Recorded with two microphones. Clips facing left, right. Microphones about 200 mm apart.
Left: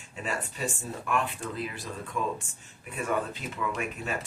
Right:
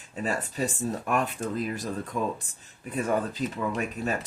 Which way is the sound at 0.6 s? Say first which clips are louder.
Right 5 dB; 40° right (ahead or behind).